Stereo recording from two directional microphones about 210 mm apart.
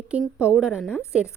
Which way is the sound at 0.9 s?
10° left (ahead or behind).